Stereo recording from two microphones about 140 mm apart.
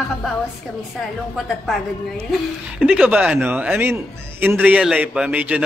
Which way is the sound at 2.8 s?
10° right (ahead or behind).